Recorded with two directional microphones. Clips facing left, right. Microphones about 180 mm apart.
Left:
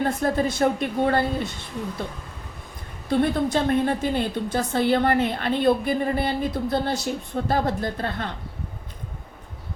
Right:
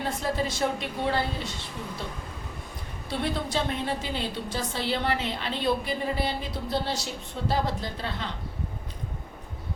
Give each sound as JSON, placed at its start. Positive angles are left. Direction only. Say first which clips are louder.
{"t": 0.0, "sound": "a woman's voice", "louder": "left 6 dB", "side_deg": 50}
{"t": 3.1, "sound": "a woman's voice", "louder": "left 8 dB", "side_deg": 50}